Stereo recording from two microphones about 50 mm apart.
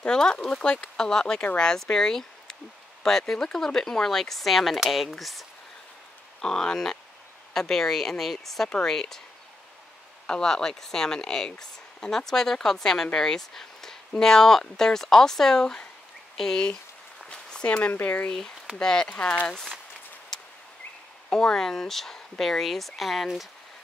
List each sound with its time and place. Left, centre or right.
0.0 s speech: centre
6.4 s speech: centre
8.6 s speech: centre
8.9 s speech: centre
10.2 s speech: centre
17.3 s a sound: centre
18.0 s speech: left
18.3 s speech: centre
18.8 s speech: centre
21.3 s speech: centre